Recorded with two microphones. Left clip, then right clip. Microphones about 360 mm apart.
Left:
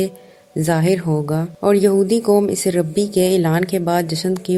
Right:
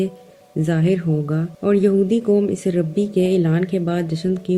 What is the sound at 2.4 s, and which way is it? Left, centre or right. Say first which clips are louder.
Speech: left 3 dB; centre.